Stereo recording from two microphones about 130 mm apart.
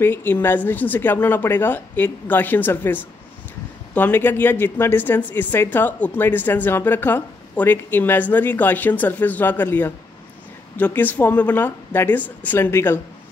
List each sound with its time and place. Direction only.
0.0 s speech: 15° left (ahead or behind)